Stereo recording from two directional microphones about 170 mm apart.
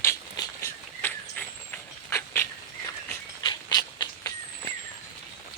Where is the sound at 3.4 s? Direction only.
25° left (ahead or behind).